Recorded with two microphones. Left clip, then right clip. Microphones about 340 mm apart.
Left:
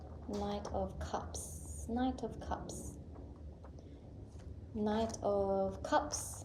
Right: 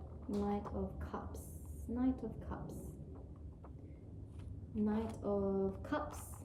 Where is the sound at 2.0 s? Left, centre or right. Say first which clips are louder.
Left 1 dB; centre.